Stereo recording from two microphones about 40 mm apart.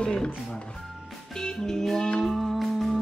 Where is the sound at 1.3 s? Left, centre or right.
Centre.